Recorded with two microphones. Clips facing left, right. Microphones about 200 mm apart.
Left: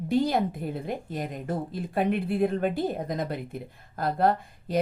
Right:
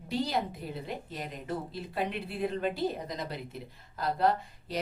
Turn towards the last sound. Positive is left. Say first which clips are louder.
# left 3 dB
turn(degrees=50)  # may be behind; listen again after turning